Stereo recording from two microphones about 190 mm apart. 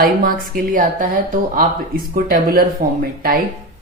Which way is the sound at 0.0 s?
50° right (ahead or behind).